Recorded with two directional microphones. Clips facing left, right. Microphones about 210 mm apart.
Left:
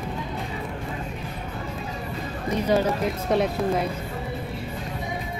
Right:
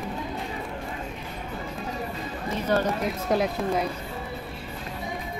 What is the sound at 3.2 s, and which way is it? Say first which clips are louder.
Speech: left 2 dB; centre (ahead or behind).